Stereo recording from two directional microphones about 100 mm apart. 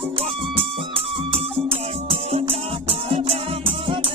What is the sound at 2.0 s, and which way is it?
Music, 75° right (ahead or behind).